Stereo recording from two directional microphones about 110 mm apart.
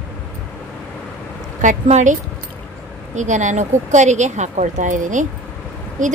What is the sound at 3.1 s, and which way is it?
A woman's voice, 90° right.